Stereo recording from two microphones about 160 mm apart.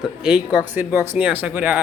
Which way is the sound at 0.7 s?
15° right (ahead or behind).